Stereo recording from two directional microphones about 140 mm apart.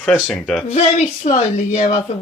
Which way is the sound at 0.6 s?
50° left (ahead or behind).